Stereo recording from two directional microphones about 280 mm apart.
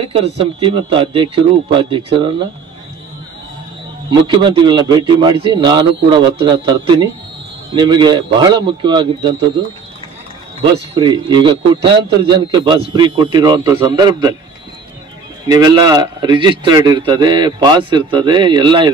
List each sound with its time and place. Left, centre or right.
0.1 s a man's voice: centre
4.1 s a man's voice: centre
11.0 s a man's voice: centre
15.4 s a man's voice: centre